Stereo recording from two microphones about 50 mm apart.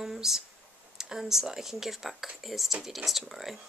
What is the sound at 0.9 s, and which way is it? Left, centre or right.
Speech, centre.